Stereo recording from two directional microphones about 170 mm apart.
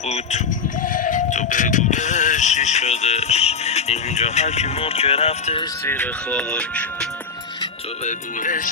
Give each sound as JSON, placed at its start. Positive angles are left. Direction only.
{"t": 0.1, "sound": "speech", "side_deg": 45}
{"t": 5.8, "sound": "speech", "side_deg": 10}
{"t": 8.0, "sound": "speech", "side_deg": 50}